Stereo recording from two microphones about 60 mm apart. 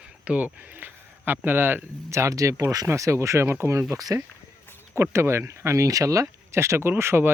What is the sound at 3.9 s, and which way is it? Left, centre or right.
Speech, right.